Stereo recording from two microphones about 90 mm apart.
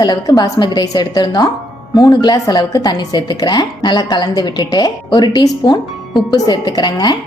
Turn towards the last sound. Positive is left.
turn(degrees=50)  # may be behind; listen again after turning